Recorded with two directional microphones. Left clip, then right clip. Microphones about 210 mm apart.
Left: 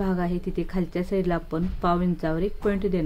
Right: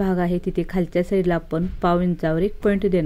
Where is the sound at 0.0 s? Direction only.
25° right (ahead or behind).